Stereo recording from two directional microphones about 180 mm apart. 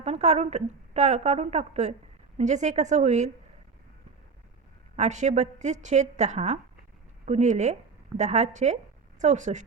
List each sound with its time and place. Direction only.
0.0 s a woman's voice: 40° right (ahead or behind)
4.9 s a woman's voice: 40° right (ahead or behind)